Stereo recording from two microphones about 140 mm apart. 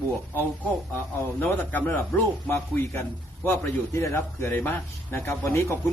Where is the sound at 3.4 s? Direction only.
20° left (ahead or behind).